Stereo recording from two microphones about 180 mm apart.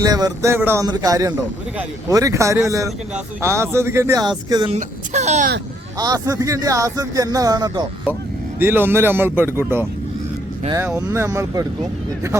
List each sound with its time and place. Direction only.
0.0 s speech: 20° right (ahead or behind)
4.7 s speech: 40° right (ahead or behind)
6.0 s speech: 20° right (ahead or behind)
8.5 s speech: 10° right (ahead or behind)